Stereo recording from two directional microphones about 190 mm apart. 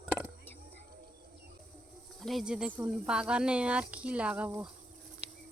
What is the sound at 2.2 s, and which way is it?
Speech, centre (ahead or behind).